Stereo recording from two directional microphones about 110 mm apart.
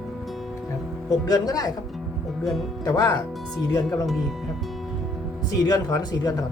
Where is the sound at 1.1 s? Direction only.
35° left (ahead or behind).